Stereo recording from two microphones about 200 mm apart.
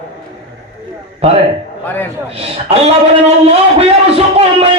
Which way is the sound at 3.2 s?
30° right (ahead or behind).